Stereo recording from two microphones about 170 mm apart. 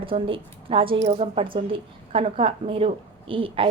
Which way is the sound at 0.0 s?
30° right (ahead or behind).